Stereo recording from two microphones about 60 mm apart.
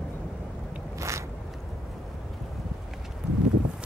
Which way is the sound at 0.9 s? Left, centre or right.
Right.